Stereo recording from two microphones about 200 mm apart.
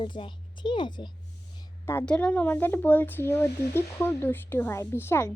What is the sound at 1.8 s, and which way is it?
Speech, 10° left (ahead or behind).